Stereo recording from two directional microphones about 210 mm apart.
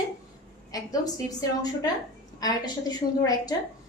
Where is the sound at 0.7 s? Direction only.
15° left (ahead or behind).